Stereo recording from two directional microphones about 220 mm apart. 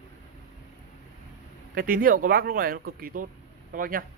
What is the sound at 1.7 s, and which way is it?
Speech, 40° right (ahead or behind).